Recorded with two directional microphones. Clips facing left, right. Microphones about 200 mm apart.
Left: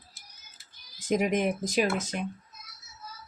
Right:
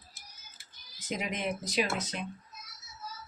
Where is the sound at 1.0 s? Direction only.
50° left (ahead or behind).